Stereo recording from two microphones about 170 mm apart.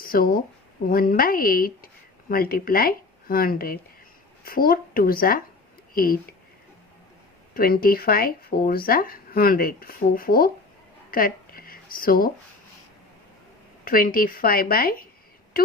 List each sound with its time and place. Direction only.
0.0 s speech: 60° left (ahead or behind)
7.5 s speech: 60° left (ahead or behind)
11.1 s a sound: 60° left (ahead or behind)
13.8 s speech: 60° left (ahead or behind)